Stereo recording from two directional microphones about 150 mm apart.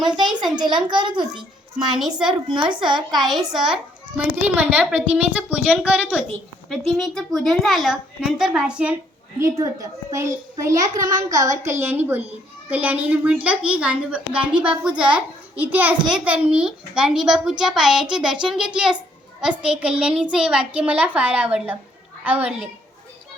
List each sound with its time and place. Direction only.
0.2 s a child's voice: 30° right (ahead or behind)
2.0 s a woman's voice: 5° right (ahead or behind)
9.4 s a child's voice: 20° right (ahead or behind)